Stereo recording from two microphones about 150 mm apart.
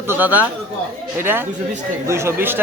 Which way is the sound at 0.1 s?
10° right (ahead or behind).